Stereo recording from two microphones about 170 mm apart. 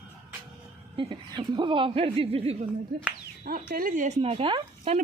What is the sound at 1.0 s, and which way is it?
Speech, 30° right (ahead or behind).